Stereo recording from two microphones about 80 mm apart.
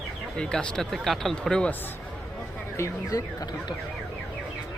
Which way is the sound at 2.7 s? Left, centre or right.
Left.